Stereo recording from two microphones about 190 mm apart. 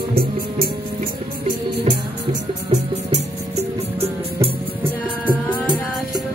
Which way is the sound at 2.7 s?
35° right (ahead or behind).